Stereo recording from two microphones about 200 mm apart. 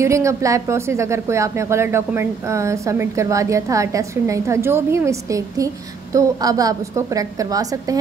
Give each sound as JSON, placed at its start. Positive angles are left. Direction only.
{"t": 0.0, "sound": "a woman's voice", "side_deg": -15}